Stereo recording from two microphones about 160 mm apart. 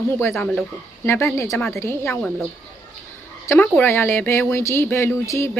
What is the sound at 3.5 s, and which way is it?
Speech, 10° left (ahead or behind).